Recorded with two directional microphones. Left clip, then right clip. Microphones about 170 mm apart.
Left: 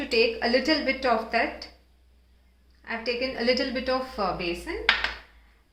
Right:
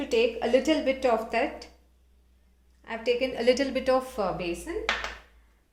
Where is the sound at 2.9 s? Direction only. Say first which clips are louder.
Right 2 dB; 60° right (ahead or behind).